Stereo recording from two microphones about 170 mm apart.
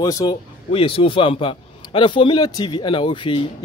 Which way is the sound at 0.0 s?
20° left (ahead or behind).